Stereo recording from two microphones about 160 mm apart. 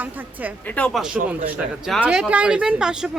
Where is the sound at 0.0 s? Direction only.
10° right (ahead or behind).